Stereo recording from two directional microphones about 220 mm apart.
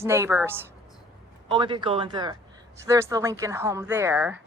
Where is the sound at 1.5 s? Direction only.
20° right (ahead or behind).